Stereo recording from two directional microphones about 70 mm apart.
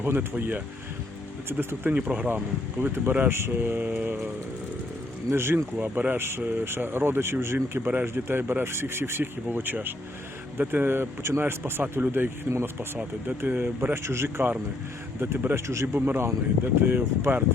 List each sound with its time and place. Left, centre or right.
0.0 s speech: right
5.3 s speech: right
5.7 s speech: right
12.5 s speech: right
13.2 s speech: right
16.0 s speech: right